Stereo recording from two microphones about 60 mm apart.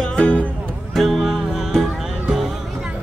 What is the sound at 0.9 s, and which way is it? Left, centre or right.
Music, centre.